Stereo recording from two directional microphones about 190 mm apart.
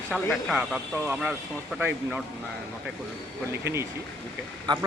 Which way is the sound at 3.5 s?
15° right (ahead or behind).